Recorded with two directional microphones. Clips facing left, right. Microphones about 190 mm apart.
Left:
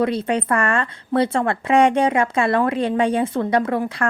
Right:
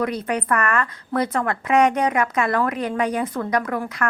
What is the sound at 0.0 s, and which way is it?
A woman's voice, 25° left (ahead or behind).